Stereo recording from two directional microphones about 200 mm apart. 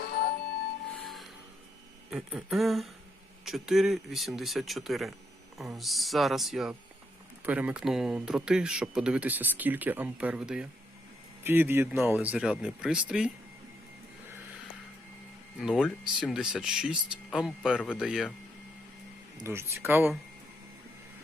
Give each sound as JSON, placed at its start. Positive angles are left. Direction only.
{"t": 0.0, "sound": "music", "side_deg": 50}
{"t": 1.0, "sound": "music", "side_deg": 0}
{"t": 2.0, "sound": "speech", "side_deg": 0}
{"t": 15.5, "sound": "speech", "side_deg": 0}
{"t": 19.4, "sound": "speech", "side_deg": -15}